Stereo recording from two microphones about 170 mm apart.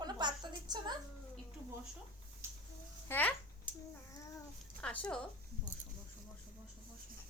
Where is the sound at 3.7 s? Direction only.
30° right (ahead or behind).